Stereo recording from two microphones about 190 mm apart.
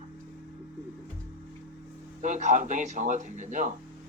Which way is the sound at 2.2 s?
40° right (ahead or behind).